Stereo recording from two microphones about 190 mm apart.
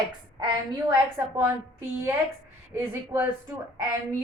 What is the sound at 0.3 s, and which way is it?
Speech, 20° right (ahead or behind).